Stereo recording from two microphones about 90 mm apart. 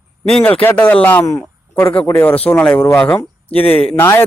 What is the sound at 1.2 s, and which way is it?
Speech, 35° left (ahead or behind).